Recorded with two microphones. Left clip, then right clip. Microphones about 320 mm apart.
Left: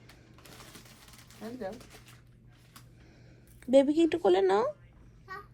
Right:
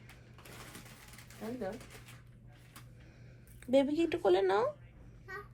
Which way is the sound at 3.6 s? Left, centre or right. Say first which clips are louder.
Left 6 dB; left.